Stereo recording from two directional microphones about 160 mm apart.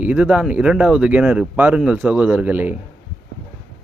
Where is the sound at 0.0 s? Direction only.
10° right (ahead or behind).